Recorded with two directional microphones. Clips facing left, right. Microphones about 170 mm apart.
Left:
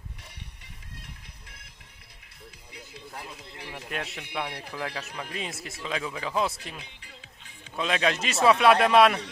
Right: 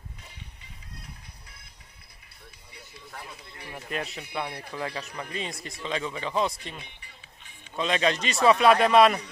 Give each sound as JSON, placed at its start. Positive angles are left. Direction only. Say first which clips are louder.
{"t": 3.7, "sound": "speech", "louder": "right 2 dB", "side_deg": 0}
{"t": 6.9, "sound": "music", "louder": "left 2 dB", "side_deg": 90}
{"t": 7.7, "sound": "speech", "louder": "right 1 dB", "side_deg": 0}